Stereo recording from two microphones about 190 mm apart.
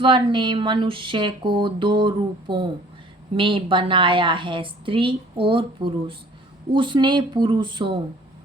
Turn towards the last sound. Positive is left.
turn(degrees=-25)  # may be behind; listen again after turning